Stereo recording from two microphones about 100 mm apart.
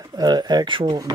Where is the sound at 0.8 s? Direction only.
40° right (ahead or behind).